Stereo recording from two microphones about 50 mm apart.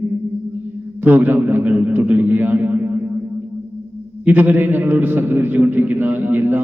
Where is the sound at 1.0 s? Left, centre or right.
Right.